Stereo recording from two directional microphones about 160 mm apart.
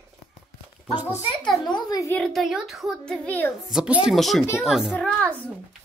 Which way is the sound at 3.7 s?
5° right (ahead or behind).